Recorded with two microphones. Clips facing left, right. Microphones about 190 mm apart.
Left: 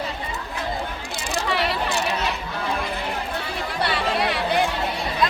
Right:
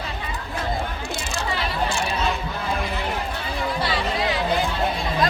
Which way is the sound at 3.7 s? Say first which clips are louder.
Left 1 dB; 65° left (ahead or behind).